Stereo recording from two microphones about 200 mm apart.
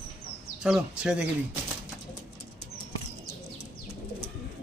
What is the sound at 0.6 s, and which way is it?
Speech, 5° right (ahead or behind).